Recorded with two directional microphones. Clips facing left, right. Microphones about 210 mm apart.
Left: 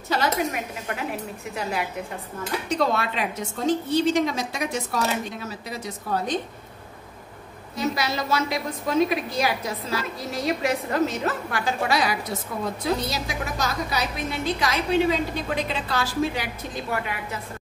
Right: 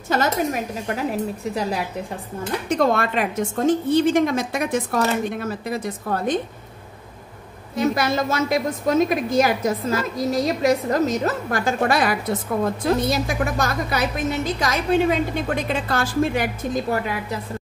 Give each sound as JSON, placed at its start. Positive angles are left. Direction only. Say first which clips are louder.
{"t": 1.4, "sound": "a woman's voice", "louder": "right 5 dB", "side_deg": -35}
{"t": 2.7, "sound": "a woman's voice", "louder": "right 5 dB", "side_deg": -50}
{"t": 7.7, "sound": "a woman's voice", "louder": "right 6 dB", "side_deg": -55}